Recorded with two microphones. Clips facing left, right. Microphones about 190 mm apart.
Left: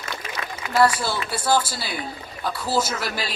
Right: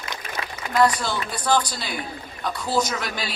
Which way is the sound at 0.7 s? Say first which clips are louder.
Left 1 dB; 10° left (ahead or behind).